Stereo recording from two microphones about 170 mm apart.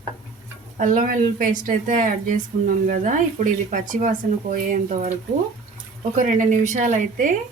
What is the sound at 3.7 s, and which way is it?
A woman's voice, 50° right (ahead or behind).